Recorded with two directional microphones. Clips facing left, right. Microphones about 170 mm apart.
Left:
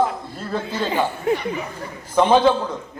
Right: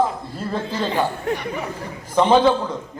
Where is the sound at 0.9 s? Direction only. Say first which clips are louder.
Left 2 dB; 5° left (ahead or behind).